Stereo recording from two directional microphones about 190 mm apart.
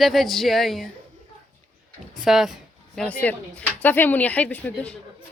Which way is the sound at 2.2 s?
Centre (ahead or behind).